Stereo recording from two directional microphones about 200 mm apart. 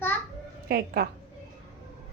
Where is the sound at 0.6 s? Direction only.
50° right (ahead or behind).